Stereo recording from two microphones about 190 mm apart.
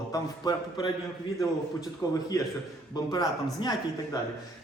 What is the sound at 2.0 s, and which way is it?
A man's voice, 15° left (ahead or behind).